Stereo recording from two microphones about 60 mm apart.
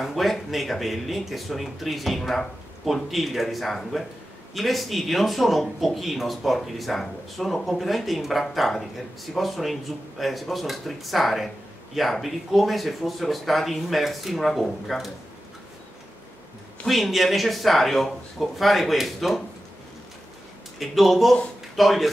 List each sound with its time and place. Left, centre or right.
0.0 s speech: centre
16.8 s speech: centre
20.8 s speech: centre